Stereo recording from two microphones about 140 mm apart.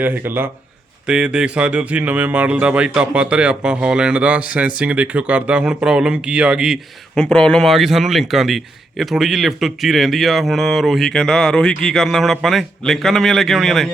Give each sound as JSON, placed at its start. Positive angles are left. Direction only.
{"t": 0.0, "sound": "speech", "side_deg": -15}
{"t": 7.2, "sound": "a man's voice", "side_deg": 5}